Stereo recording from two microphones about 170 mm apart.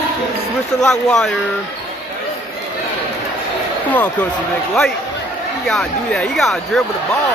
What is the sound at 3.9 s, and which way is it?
Speech, 10° left (ahead or behind).